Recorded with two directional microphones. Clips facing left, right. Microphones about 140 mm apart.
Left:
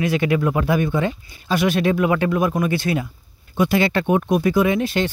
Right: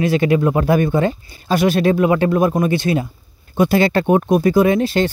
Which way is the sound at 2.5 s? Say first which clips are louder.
Right 4 dB; 25° right (ahead or behind).